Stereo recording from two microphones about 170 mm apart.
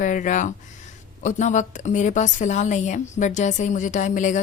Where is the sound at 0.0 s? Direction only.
50° left (ahead or behind).